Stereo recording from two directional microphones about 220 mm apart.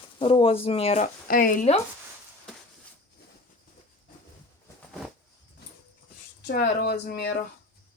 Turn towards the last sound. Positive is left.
turn(degrees=45)  # may be behind; listen again after turning